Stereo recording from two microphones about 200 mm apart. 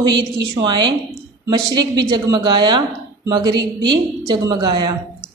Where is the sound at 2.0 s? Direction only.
20° right (ahead or behind).